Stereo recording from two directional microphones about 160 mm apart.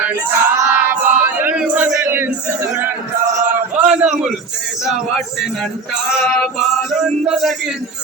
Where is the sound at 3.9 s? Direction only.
5° right (ahead or behind).